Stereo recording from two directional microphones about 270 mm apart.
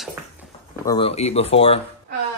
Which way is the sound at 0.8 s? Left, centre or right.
Centre.